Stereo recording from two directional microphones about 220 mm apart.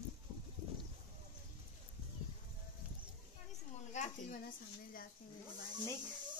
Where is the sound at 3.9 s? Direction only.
30° left (ahead or behind).